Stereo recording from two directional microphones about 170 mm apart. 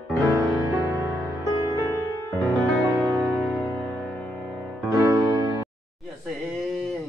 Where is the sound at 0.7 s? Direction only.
20° right (ahead or behind).